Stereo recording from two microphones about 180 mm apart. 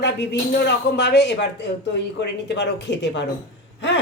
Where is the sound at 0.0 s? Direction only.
70° left (ahead or behind).